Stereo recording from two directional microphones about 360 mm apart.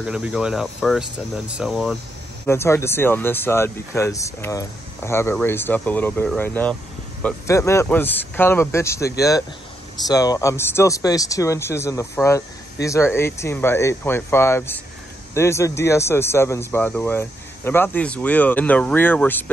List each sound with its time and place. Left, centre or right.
0.0 s speech: centre